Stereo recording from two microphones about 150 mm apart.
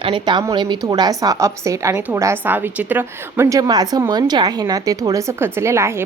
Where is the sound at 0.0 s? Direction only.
35° right (ahead or behind).